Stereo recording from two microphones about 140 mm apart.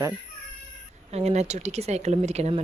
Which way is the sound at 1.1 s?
50° right (ahead or behind).